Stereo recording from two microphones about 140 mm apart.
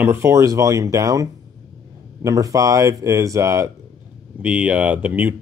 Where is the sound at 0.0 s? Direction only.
15° right (ahead or behind).